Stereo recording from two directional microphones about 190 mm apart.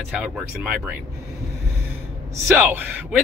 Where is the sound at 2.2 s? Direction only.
10° right (ahead or behind).